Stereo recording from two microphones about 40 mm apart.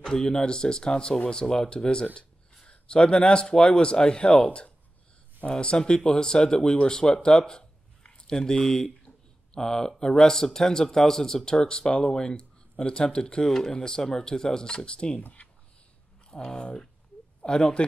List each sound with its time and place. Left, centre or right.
0.1 s speech: centre
16.3 s speech: left